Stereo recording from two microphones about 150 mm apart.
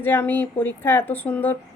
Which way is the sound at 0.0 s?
10° left (ahead or behind).